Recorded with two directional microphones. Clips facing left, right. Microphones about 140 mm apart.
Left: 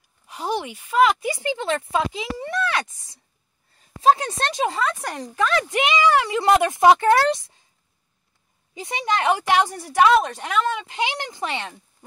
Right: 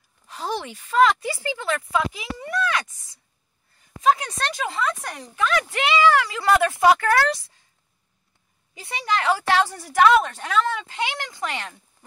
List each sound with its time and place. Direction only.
0.3 s speech: 15° left (ahead or behind); by 5.7 s 35° left (ahead or behind)
5.7 s speech: 20° left (ahead or behind)
8.7 s speech: 20° left (ahead or behind)